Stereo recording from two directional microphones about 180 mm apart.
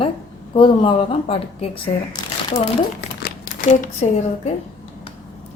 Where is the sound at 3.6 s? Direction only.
40° left (ahead or behind).